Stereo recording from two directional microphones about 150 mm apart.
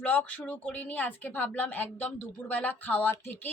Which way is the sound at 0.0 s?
10° left (ahead or behind).